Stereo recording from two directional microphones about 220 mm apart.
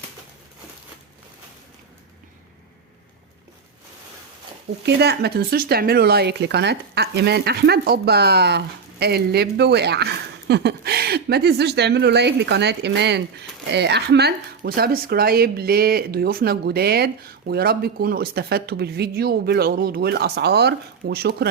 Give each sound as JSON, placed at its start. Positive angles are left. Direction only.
{"t": 4.9, "sound": "speech", "side_deg": -50}